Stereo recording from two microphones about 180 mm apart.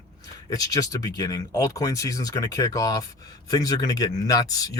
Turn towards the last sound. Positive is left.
turn(degrees=20)  # may be behind; listen again after turning